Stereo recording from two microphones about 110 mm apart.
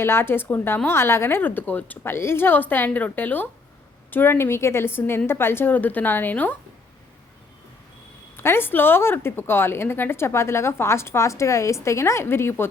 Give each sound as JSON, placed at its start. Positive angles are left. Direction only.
{"t": 0.0, "sound": "a woman's voice", "side_deg": 20}
{"t": 8.4, "sound": "a woman's voice", "side_deg": 20}